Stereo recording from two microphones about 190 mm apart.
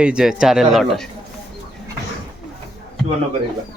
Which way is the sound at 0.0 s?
5° right (ahead or behind).